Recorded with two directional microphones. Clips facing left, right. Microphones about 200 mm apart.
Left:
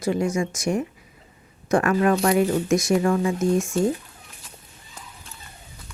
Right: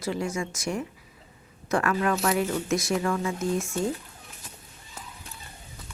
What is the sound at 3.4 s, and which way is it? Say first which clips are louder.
Speech: left 6 dB; 15° left (ahead or behind).